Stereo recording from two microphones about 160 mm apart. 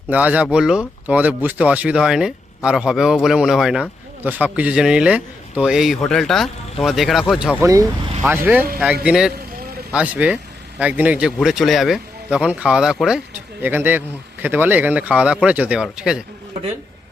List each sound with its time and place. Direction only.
0.1 s speech: 10° right (ahead or behind)
7.6 s speech: 20° right (ahead or behind); by 16.2 s 5° right (ahead or behind)